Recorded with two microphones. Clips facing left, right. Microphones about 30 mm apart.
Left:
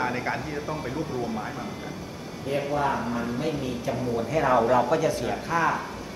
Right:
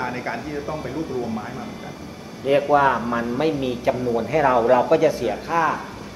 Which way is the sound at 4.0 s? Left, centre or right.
Centre.